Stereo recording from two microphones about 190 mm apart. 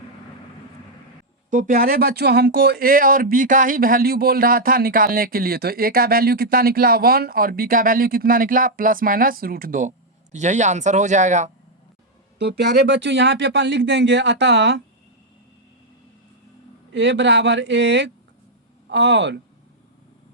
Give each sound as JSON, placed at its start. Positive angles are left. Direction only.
{"t": 1.5, "sound": "speech", "side_deg": -45}
{"t": 12.4, "sound": "speech", "side_deg": -60}
{"t": 16.9, "sound": "speech", "side_deg": -70}